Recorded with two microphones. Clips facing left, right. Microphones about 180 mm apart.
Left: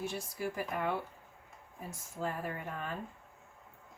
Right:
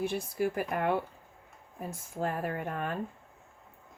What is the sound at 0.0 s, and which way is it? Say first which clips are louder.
Speech: right 7 dB; 60° right (ahead or behind).